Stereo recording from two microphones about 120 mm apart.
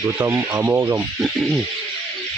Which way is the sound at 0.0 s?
25° right (ahead or behind).